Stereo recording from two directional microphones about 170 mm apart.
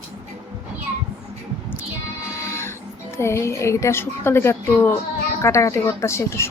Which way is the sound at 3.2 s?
15° left (ahead or behind).